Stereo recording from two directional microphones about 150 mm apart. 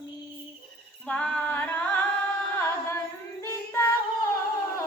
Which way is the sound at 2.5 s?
15° left (ahead or behind).